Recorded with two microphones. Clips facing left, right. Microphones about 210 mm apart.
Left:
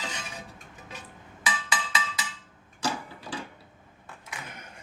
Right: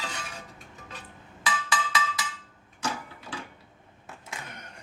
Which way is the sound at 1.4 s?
20° left (ahead or behind).